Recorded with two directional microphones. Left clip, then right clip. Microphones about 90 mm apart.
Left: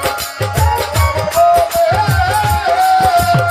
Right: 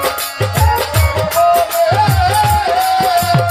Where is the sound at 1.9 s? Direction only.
20° left (ahead or behind).